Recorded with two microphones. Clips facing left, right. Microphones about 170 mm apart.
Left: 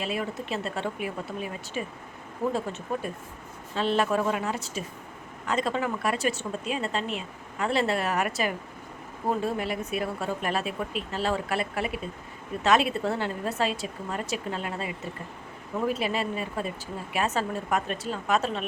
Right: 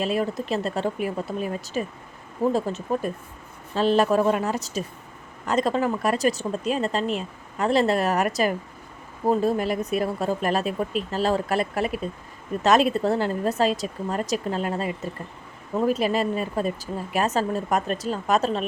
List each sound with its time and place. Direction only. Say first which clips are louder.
0.0 s speech: right 6 dB; 40° right (ahead or behind)